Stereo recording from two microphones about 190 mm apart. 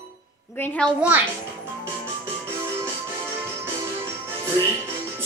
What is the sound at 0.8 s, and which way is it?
Speech, 5° left (ahead or behind).